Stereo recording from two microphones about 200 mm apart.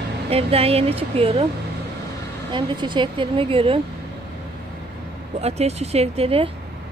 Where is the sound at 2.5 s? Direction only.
25° right (ahead or behind).